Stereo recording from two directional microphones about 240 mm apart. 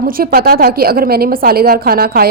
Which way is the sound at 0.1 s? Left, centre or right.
Right.